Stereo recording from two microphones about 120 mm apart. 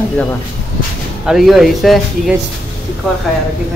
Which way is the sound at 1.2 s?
5° right (ahead or behind).